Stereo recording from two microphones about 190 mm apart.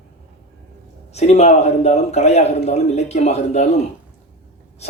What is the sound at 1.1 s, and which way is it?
Speech, 35° left (ahead or behind).